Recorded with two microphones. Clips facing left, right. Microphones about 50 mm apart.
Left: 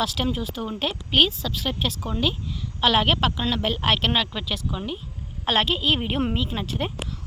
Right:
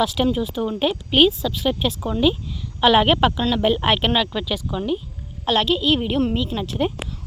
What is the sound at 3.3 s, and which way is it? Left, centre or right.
Speech, centre.